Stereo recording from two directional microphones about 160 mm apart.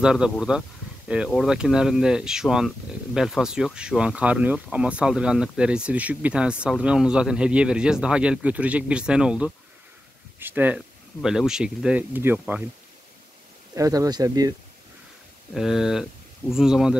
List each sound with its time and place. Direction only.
0.0 s speech: 5° right (ahead or behind)
13.7 s speech: 20° right (ahead or behind)
15.5 s speech: centre (ahead or behind)